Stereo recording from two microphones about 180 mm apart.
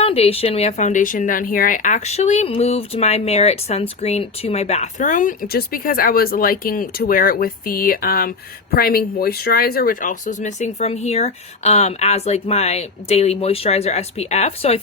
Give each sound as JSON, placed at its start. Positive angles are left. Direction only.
{"t": 0.0, "sound": "speech", "side_deg": 35}